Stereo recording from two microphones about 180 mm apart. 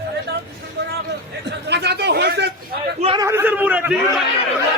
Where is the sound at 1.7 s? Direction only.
65° right (ahead or behind).